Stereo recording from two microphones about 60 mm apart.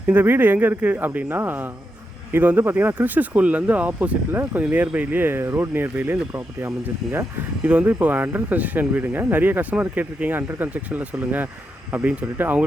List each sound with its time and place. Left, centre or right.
0.1 s speech: right
4.3 s speech: right
4.7 s speech: right
6.3 s speech: right
7.6 s speech: right
7.9 s speech: right